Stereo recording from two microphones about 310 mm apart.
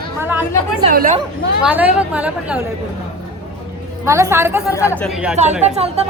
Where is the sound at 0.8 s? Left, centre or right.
Right.